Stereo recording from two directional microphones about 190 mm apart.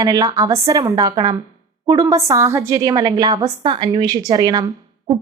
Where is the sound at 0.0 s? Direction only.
20° right (ahead or behind).